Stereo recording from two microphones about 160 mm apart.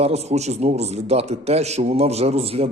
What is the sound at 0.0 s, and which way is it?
A man's voice, 40° right (ahead or behind).